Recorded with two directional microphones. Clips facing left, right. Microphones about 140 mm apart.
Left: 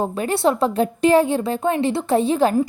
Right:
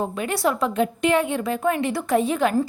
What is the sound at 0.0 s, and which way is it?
Speech, 30° left (ahead or behind).